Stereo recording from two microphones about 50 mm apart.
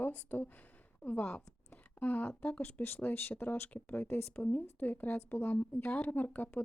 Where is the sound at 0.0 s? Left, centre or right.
Left.